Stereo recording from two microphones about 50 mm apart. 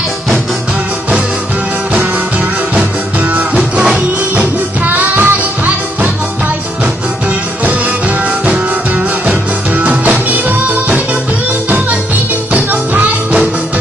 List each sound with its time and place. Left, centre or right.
4.4 s music: right
8.5 s music: right
12.5 s music: right